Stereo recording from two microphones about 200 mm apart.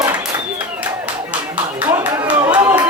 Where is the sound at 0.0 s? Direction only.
15° right (ahead or behind).